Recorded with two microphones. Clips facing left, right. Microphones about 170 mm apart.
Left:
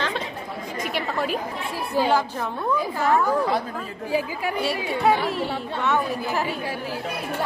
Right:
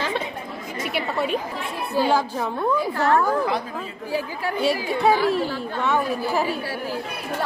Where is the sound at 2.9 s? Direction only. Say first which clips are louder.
Left 1 dB; 10° left (ahead or behind).